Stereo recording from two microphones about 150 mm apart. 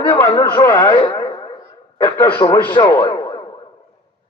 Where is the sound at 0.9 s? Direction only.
30° left (ahead or behind).